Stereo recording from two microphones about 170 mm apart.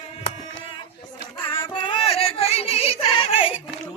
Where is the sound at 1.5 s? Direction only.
30° left (ahead or behind).